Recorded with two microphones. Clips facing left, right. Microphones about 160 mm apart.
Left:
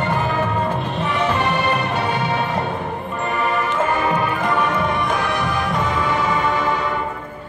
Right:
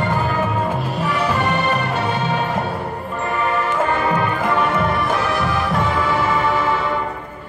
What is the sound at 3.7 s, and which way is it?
Music, centre (ahead or behind).